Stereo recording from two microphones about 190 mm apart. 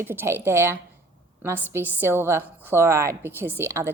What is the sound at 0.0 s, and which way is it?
A woman's voice, 10° right (ahead or behind).